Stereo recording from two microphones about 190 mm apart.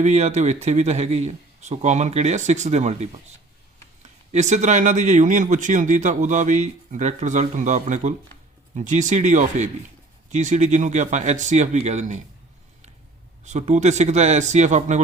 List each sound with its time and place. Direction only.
0.0 s speech: 35° right (ahead or behind)
13.4 s speech: 35° right (ahead or behind)